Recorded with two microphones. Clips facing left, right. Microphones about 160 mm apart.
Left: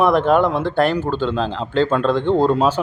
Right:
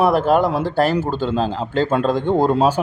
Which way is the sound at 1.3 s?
40° right (ahead or behind).